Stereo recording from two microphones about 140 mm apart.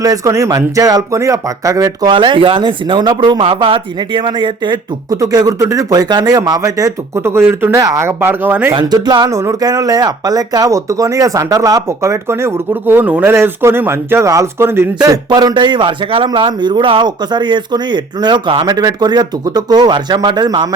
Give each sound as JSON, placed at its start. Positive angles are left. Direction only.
{"t": 0.0, "sound": "a man's voice", "side_deg": -25}
{"t": 8.7, "sound": "a man's voice", "side_deg": -30}